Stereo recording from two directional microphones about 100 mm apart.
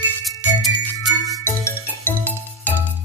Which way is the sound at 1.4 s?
25° left (ahead or behind).